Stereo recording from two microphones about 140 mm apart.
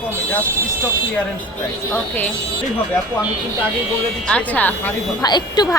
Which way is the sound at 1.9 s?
15° left (ahead or behind).